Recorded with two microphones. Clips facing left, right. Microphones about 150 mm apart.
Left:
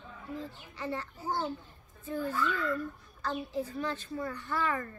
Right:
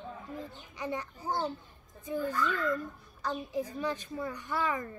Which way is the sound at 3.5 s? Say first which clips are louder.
Right 1 dB; 15° right (ahead or behind).